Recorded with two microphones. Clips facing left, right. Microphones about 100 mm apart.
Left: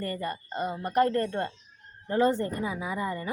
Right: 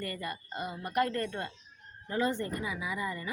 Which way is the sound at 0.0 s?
35° left (ahead or behind).